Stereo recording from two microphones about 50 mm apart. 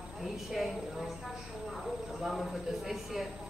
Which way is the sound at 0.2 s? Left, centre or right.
Centre.